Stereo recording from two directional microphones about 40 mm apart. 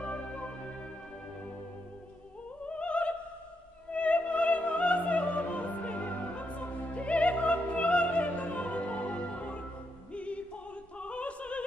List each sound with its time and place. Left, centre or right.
0.0 s music: left
2.7 s opera: left
10.1 s music: left
11.0 s opera: left